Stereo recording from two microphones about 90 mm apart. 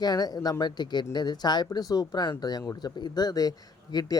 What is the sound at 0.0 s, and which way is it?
Speech, 50° left (ahead or behind).